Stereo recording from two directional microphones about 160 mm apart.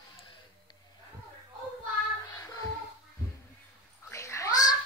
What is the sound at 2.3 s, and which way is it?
Music, 20° left (ahead or behind).